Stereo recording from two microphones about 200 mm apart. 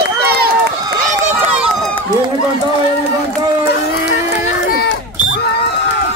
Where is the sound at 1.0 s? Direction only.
35° right (ahead or behind).